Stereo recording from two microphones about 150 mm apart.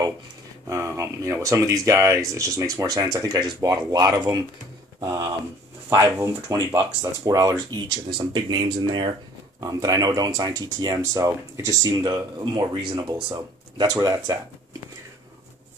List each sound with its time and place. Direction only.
0.7 s speech: 20° right (ahead or behind)